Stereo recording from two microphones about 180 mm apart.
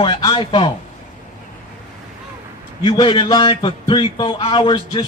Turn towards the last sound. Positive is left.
turn(degrees=25)  # may be behind; listen again after turning